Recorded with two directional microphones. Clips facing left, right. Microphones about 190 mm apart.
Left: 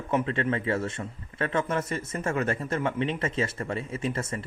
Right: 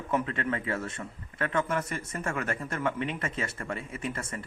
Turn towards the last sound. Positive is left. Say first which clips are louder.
# left 5 dB
turn(degrees=25)  # may be behind; listen again after turning